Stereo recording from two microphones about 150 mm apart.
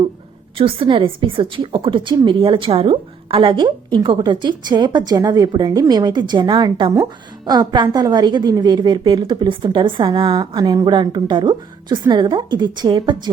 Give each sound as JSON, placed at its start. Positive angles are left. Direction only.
{"t": 0.5, "sound": "a woman's voice", "side_deg": -35}